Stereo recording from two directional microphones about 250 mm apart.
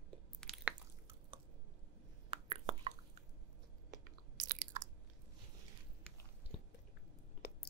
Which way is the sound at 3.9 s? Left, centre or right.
Right.